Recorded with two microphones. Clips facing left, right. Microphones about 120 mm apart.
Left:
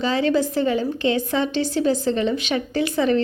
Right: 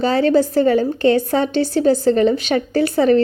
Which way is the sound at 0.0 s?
40° right (ahead or behind).